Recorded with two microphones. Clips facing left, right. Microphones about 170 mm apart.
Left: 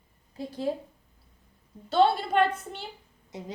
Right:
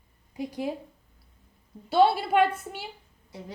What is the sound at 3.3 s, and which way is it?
Speech, 20° left (ahead or behind).